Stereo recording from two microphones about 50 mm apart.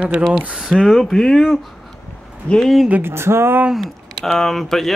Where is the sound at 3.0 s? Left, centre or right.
Right.